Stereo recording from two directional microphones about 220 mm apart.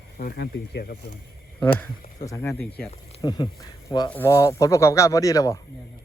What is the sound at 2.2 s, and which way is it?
Speech, 15° left (ahead or behind).